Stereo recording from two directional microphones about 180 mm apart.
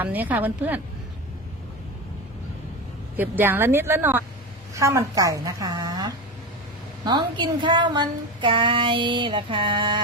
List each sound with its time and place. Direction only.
0.0 s speech: 10° right (ahead or behind)
3.2 s speech: 10° right (ahead or behind)